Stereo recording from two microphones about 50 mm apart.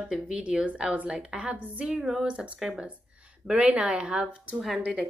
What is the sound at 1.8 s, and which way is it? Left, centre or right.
A woman's voice, centre.